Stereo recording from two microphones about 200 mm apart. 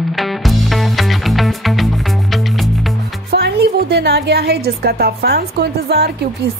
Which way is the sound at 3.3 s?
55° right (ahead or behind).